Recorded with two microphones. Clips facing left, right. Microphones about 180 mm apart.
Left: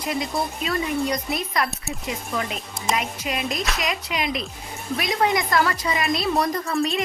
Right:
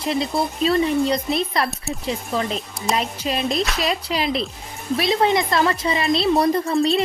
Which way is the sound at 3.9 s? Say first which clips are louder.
Right 4 dB; 30° right (ahead or behind).